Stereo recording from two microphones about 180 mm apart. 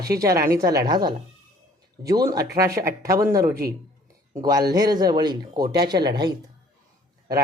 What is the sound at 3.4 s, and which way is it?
Speech, 55° right (ahead or behind).